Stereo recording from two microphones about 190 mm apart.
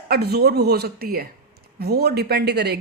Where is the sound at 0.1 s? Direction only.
55° right (ahead or behind).